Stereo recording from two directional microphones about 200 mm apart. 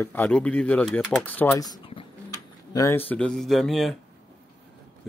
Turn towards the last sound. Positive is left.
turn(degrees=0)  # may be behind; listen again after turning